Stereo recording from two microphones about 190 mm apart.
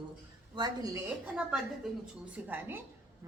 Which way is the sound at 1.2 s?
5° right (ahead or behind).